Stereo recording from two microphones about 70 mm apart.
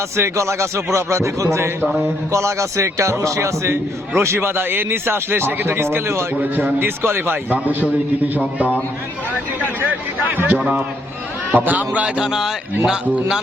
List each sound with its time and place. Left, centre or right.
0.2 s a man's voice: right
6.4 s a man's voice: right
10.3 s a man's voice: right